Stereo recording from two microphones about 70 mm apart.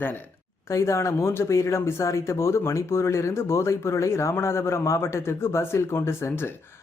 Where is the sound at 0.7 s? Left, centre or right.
Left.